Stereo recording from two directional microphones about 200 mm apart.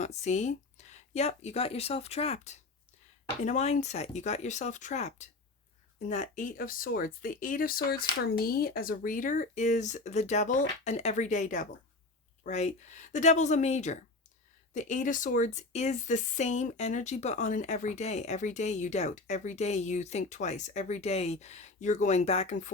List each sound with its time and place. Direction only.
0.0 s a woman's voice: 35° left (ahead or behind)
0.8 s a sound: 35° left (ahead or behind)
1.1 s a woman's voice: 35° left (ahead or behind)